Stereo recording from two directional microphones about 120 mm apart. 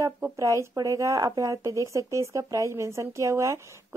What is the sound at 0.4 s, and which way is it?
Speech, 25° right (ahead or behind).